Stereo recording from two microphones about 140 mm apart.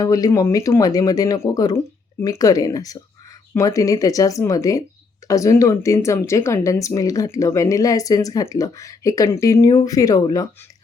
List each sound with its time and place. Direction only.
0.0 s speech: 25° left (ahead or behind)